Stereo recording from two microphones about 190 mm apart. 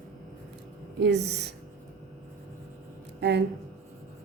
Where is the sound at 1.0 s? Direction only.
65° right (ahead or behind).